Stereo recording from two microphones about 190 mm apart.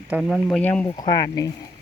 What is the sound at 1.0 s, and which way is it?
Speech, 20° left (ahead or behind).